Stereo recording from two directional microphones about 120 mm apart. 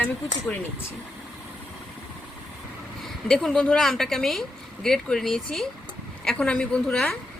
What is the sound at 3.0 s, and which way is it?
A woman's voice, 5° left (ahead or behind).